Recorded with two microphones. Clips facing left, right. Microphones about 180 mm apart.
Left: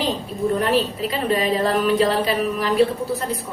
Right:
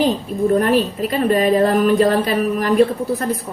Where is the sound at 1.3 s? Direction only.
50° right (ahead or behind).